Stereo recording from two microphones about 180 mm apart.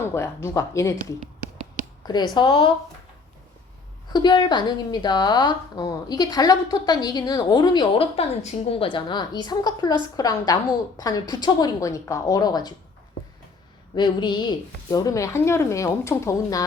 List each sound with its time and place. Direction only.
0.0 s speech: 15° left (ahead or behind)
2.0 s a woman's voice: 25° left (ahead or behind)
4.1 s a woman's voice: 25° left (ahead or behind)
13.9 s a woman's voice: 25° left (ahead or behind)